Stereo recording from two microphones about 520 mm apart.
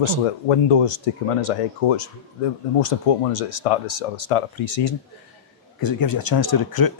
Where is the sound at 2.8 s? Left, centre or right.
Left.